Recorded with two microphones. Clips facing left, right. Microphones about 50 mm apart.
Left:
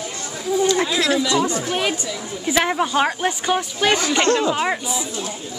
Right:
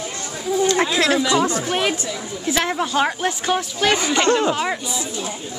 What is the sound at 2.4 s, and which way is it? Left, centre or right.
Speech, centre.